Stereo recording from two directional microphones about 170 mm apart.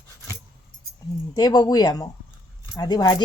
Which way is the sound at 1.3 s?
25° left (ahead or behind).